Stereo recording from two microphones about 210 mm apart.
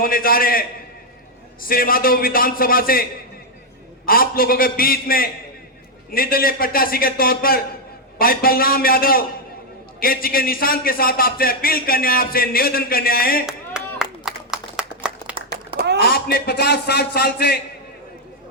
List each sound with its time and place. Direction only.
0.0 s a man's voice: 45° left (ahead or behind)
1.6 s a man's voice: 45° left (ahead or behind)
13.4 s clapping: 5° right (ahead or behind)
16.0 s a man's voice: 45° left (ahead or behind)